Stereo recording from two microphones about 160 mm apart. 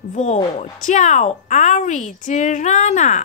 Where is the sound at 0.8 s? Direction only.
50° left (ahead or behind).